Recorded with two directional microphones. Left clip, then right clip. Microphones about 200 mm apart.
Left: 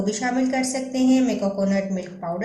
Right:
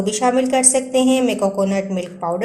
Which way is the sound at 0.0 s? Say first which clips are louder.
Right 7 dB; 40° right (ahead or behind).